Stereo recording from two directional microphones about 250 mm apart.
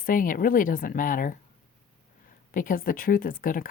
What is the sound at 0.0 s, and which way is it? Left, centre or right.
Speech, left.